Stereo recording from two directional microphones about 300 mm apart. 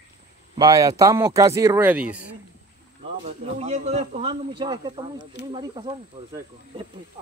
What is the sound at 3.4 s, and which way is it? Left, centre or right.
Speech, right.